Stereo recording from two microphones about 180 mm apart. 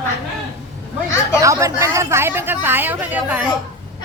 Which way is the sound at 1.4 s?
15° right (ahead or behind).